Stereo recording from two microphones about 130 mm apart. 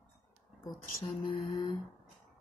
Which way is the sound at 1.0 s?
40° left (ahead or behind).